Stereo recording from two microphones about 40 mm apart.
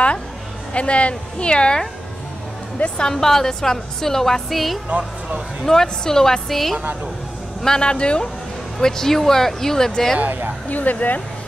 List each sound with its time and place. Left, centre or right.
0.7 s speech: left
3.0 s a woman's voice: centre
5.7 s a woman's voice: centre
7.6 s speech: centre
8.7 s a woman's voice: centre
10.7 s speech: left